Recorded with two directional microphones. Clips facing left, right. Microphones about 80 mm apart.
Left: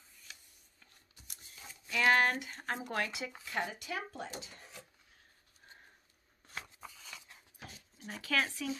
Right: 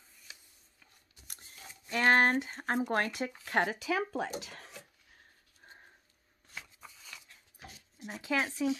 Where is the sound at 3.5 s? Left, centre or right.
Right.